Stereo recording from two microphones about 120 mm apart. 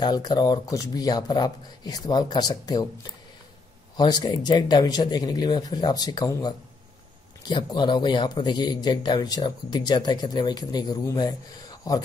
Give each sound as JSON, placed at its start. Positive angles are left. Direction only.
{"t": 0.0, "sound": "speech", "side_deg": 35}
{"t": 3.9, "sound": "speech", "side_deg": 35}